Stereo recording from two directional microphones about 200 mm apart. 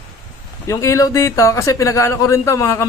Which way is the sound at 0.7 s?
15° left (ahead or behind).